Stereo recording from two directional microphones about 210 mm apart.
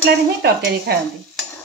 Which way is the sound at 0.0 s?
50° right (ahead or behind).